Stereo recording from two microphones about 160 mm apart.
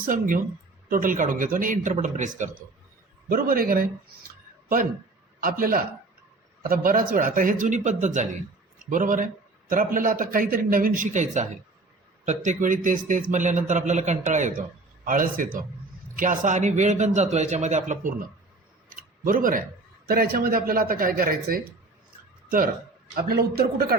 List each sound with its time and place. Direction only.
0.0 s a man's voice: 60° right (ahead or behind)
3.2 s a man's voice: 65° right (ahead or behind)
5.4 s a man's voice: 65° right (ahead or behind)
18.9 s a sound: 60° right (ahead or behind)
20.1 s a man's voice: 75° right (ahead or behind)
23.1 s a man's voice: 75° right (ahead or behind)